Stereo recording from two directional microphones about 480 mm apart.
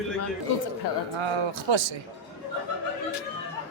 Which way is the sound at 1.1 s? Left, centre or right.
Right.